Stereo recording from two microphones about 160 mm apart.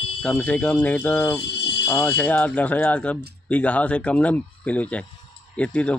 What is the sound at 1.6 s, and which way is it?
Music, 90° left.